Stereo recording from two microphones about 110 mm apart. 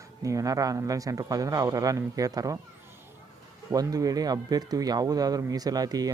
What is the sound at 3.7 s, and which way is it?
Speech, 35° right (ahead or behind).